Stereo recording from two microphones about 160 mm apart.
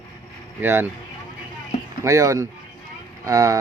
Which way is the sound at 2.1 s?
20° right (ahead or behind).